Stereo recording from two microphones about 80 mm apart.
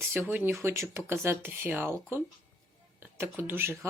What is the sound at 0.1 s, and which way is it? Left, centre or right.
Speech, right.